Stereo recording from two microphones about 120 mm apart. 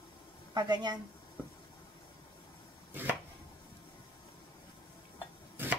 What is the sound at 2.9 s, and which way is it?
Chopping, 15° right (ahead or behind).